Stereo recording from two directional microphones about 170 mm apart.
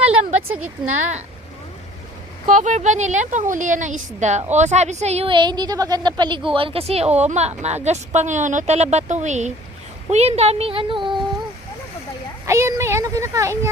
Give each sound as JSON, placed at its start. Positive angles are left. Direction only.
{"t": 0.0, "sound": "a sound", "side_deg": -40}
{"t": 0.4, "sound": "speech", "side_deg": -5}
{"t": 0.9, "sound": "a woman's voice", "side_deg": -45}
{"t": 2.5, "sound": "a woman's voice", "side_deg": -45}
{"t": 12.5, "sound": "speech", "side_deg": -15}